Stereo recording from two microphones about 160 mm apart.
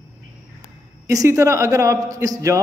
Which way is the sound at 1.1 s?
20° right (ahead or behind).